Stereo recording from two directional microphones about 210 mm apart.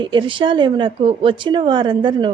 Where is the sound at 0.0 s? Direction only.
25° right (ahead or behind).